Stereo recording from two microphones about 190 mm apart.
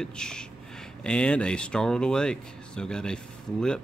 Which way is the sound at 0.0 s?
5° left (ahead or behind).